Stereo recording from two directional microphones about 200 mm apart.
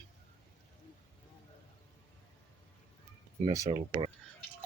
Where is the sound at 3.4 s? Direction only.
20° right (ahead or behind).